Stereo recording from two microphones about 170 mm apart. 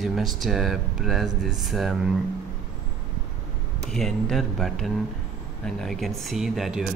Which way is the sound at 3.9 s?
Centre (ahead or behind).